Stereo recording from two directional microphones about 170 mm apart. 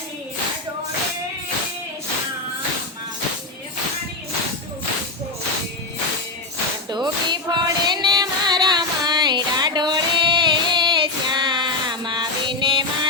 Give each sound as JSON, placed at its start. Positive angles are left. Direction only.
{"t": 6.9, "sound": "female singing", "side_deg": -25}